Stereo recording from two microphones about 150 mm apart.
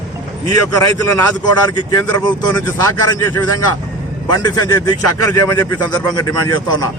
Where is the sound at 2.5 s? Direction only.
25° left (ahead or behind).